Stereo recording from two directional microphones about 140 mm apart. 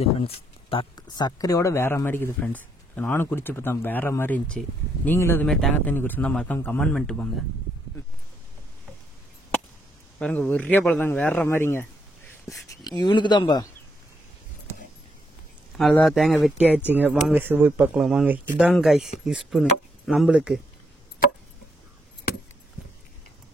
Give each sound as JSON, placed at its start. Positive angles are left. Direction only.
{"t": 0.0, "sound": "speech", "side_deg": 45}
{"t": 5.5, "sound": "speech", "side_deg": 5}
{"t": 10.1, "sound": "speech", "side_deg": 5}
{"t": 13.0, "sound": "speech", "side_deg": 35}
{"t": 15.7, "sound": "speech", "side_deg": 0}
{"t": 16.5, "sound": "speech", "side_deg": -10}